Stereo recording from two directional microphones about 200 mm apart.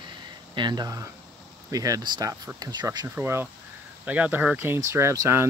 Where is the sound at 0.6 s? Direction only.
20° right (ahead or behind).